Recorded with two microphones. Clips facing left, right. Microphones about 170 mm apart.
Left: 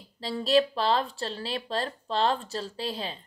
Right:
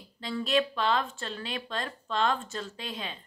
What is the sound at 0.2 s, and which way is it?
A woman's voice, 35° left (ahead or behind).